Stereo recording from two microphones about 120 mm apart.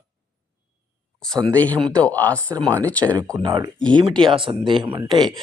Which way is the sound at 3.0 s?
25° right (ahead or behind).